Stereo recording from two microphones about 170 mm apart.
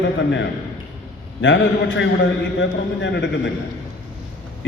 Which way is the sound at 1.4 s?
90° left.